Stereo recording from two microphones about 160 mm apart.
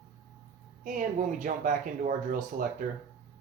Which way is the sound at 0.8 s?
55° right (ahead or behind).